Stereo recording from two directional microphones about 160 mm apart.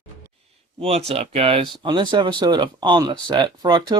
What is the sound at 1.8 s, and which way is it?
Speech, 30° right (ahead or behind).